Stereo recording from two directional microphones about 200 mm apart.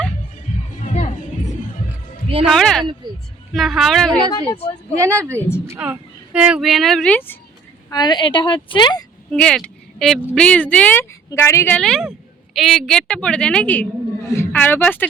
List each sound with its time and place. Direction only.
2.5 s speech: centre (ahead or behind)
4.3 s a woman's voice: 25° left (ahead or behind)
4.9 s a woman's voice: 15° right (ahead or behind)
5.3 s a woman's voice: 10° left (ahead or behind)
5.6 s speech: 10° right (ahead or behind); by 7.3 s 10° left (ahead or behind)
7.9 s a woman's voice: 20° left (ahead or behind)
9.3 s a woman's voice: 5° left (ahead or behind)